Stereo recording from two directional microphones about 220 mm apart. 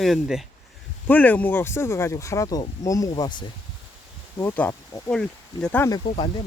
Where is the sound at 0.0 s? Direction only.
Centre (ahead or behind); by 3.4 s 20° left (ahead or behind).